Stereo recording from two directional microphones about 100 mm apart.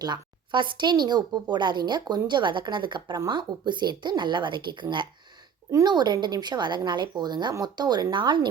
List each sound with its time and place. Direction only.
0.0 s speech: 50° right (ahead or behind)